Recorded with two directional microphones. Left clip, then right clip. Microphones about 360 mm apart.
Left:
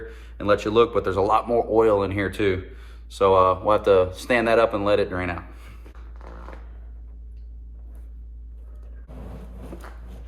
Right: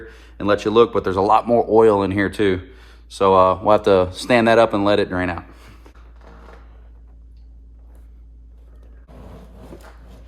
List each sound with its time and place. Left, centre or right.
0.0 s speech: right